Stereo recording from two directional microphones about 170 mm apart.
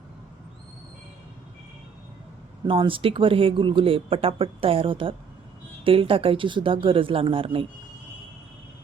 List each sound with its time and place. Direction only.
2.6 s speech: 30° right (ahead or behind)